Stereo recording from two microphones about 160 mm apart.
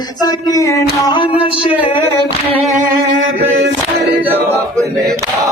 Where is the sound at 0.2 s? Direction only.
25° left (ahead or behind).